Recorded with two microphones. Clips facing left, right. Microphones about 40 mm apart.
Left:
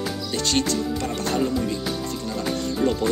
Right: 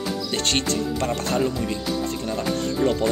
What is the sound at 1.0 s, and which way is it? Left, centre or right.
Speech, centre.